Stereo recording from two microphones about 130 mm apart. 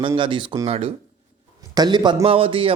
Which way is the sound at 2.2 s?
45° right (ahead or behind).